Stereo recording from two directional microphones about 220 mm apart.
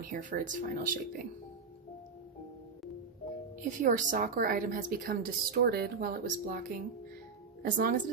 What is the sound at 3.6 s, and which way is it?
Speech, 35° right (ahead or behind).